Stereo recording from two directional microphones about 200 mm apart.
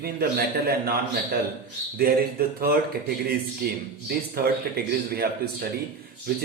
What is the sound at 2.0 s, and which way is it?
Speech, 50° right (ahead or behind).